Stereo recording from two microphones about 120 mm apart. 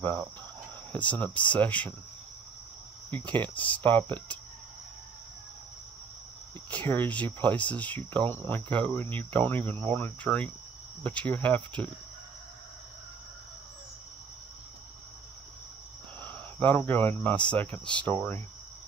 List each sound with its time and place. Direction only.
0.9 s cricket: 15° left (ahead or behind)
3.1 s cricket: 15° left (ahead or behind)
6.7 s cricket: 15° left (ahead or behind)
16.2 s speech: 15° left (ahead or behind)